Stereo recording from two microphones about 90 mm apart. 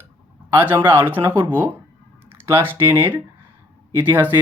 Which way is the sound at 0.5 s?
20° right (ahead or behind).